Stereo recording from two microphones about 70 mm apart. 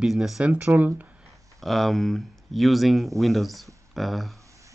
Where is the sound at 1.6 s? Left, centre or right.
Centre.